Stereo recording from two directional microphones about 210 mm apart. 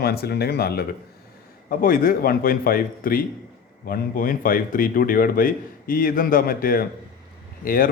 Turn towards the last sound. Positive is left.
turn(degrees=40)  # may be behind; listen again after turning